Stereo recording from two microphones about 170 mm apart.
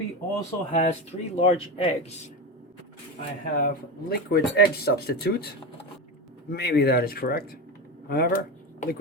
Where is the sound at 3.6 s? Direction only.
70° left (ahead or behind).